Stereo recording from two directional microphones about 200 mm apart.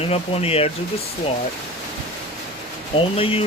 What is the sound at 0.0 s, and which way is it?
Speech, 30° left (ahead or behind).